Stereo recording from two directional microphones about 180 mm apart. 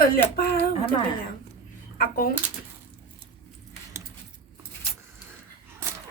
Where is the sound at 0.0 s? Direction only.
55° left (ahead or behind).